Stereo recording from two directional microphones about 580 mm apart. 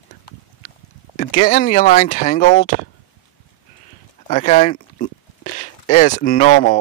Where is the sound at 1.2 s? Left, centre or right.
Centre.